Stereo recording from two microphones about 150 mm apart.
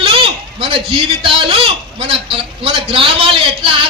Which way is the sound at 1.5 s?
40° right (ahead or behind).